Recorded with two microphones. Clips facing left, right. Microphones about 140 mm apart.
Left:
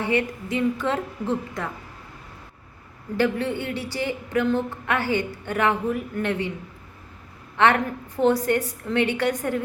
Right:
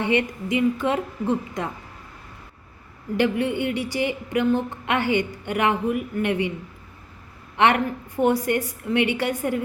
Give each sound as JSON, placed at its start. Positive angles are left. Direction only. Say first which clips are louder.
{"t": 0.0, "sound": "a woman's voice", "louder": "right 1 dB", "side_deg": -20}
{"t": 3.2, "sound": "a woman's voice", "louder": "right 1 dB", "side_deg": -15}
{"t": 7.5, "sound": "a woman's voice", "louder": "even", "side_deg": -15}